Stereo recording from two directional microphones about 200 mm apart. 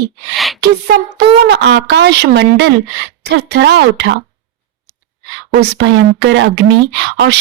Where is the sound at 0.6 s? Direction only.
55° right (ahead or behind).